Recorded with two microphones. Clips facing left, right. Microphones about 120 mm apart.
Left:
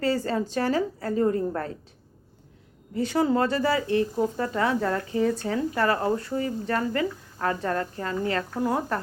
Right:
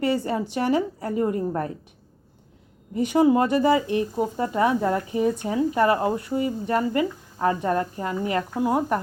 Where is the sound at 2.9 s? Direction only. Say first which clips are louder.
Right 5 dB; 15° right (ahead or behind).